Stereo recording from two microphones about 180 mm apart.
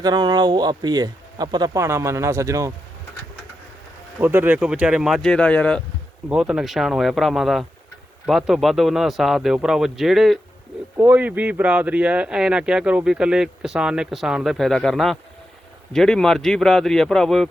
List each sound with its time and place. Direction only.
0.0 s speech: 25° right (ahead or behind)
4.2 s speech: 10° right (ahead or behind); by 5.8 s 5° left (ahead or behind)
6.2 s speech: 5° right (ahead or behind)